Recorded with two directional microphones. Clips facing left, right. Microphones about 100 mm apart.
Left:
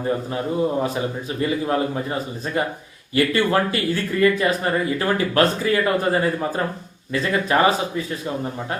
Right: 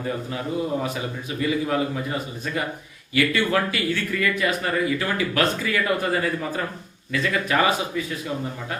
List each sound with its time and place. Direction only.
0.0 s speech: 30° left (ahead or behind)
3.2 s speech: 35° left (ahead or behind)